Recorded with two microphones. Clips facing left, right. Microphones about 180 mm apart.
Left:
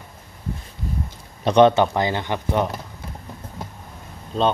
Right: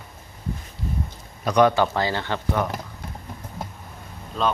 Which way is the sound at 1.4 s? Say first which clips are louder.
Left 4 dB; 25° left (ahead or behind).